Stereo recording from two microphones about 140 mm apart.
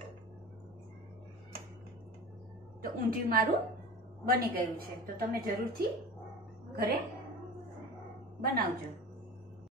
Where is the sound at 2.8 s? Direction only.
90° right.